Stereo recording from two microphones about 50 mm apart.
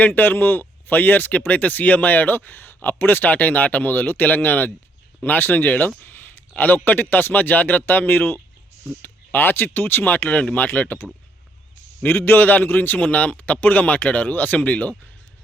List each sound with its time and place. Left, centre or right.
0.0 s speech: left
6.0 s a sound: left
6.6 s speech: left
10.2 s speech: left
12.0 s speech: left